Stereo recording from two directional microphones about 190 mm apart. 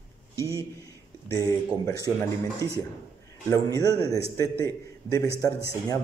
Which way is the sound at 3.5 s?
20° left (ahead or behind).